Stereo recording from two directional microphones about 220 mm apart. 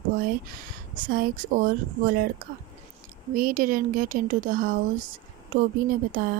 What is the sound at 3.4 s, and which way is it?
Speech, 40° right (ahead or behind).